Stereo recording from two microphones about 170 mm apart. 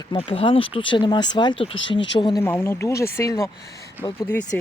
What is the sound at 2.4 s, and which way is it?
Speech, 15° left (ahead or behind).